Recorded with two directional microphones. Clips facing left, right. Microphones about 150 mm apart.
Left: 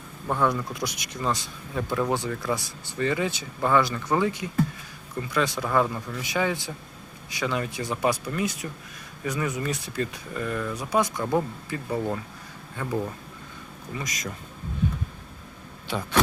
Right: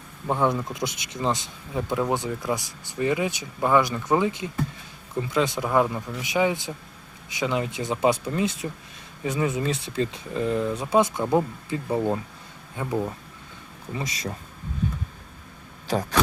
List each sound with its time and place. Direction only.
0.3 s speech: 20° right (ahead or behind)
13.9 s speech: 30° right (ahead or behind)
15.9 s a sound: 40° right (ahead or behind)